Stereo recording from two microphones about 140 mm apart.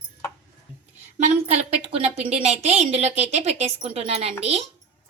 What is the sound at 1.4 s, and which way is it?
A woman's voice, 50° right (ahead or behind).